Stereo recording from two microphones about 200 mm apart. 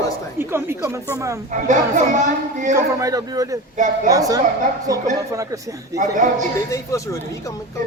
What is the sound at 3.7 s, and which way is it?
Speech, 40° right (ahead or behind).